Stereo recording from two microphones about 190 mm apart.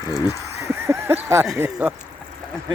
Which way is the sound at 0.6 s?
15° right (ahead or behind).